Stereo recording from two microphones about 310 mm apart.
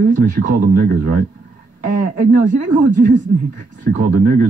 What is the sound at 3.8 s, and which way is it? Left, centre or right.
Speech, right.